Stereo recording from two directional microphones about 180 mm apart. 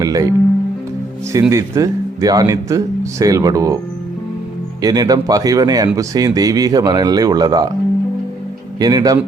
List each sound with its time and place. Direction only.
0.0 s music: 20° right (ahead or behind)
1.3 s speech: 15° right (ahead or behind)
4.8 s speech: 20° right (ahead or behind)
8.8 s speech: 20° right (ahead or behind)